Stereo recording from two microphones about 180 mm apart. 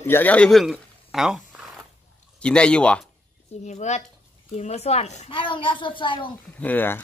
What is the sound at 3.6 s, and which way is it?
A woman's voice, 40° left (ahead or behind).